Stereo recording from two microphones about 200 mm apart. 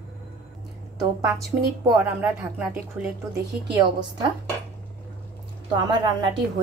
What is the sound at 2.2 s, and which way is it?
Speech, 5° right (ahead or behind).